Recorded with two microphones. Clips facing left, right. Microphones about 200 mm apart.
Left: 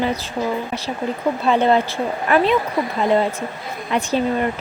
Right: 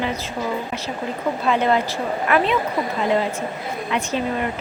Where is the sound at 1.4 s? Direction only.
30° left (ahead or behind).